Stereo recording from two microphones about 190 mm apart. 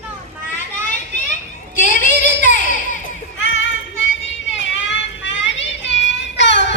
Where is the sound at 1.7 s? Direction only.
40° left (ahead or behind).